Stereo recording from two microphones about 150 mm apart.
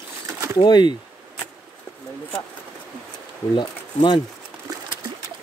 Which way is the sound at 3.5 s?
30° left (ahead or behind).